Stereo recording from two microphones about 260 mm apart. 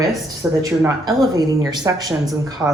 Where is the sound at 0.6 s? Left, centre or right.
Centre.